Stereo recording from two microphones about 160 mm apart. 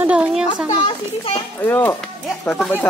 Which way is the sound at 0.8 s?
35° left (ahead or behind).